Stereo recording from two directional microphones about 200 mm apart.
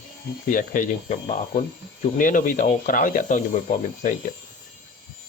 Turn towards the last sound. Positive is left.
turn(degrees=40)  # may be behind; listen again after turning